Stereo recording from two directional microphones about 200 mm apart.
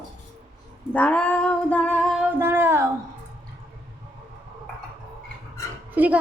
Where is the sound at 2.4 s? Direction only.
10° right (ahead or behind).